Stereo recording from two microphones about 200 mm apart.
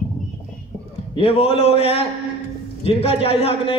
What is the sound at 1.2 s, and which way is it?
A man's voice, 30° left (ahead or behind).